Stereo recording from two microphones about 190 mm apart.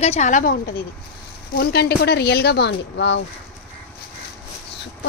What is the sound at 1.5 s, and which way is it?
Speech, 55° left (ahead or behind).